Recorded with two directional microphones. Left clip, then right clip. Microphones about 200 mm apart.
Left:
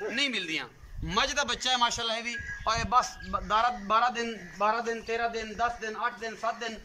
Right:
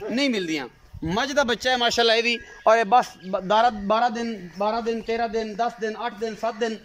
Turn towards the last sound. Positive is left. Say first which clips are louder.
# right 7 dB
turn(degrees=-35)  # may be behind; listen again after turning